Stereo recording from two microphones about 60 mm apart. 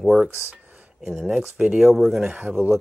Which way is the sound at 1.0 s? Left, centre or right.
Centre.